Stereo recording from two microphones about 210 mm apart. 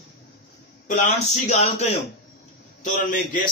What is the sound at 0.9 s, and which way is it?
Speech, 35° left (ahead or behind).